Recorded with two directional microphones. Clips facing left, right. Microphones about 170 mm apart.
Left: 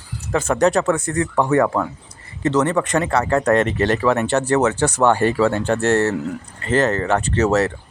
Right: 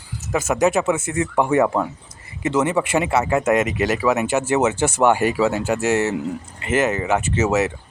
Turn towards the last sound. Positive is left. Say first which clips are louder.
# left 2 dB
turn(degrees=-5)  # may be behind; listen again after turning